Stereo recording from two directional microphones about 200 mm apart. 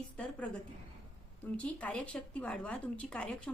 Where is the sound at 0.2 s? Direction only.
5° left (ahead or behind).